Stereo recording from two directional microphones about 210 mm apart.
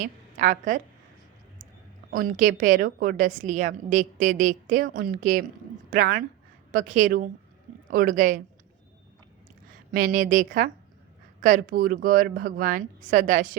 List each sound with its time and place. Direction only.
0.0 s a woman's voice: 40° right (ahead or behind)
2.0 s a woman's voice: 40° right (ahead or behind)
9.9 s a woman's voice: 40° right (ahead or behind)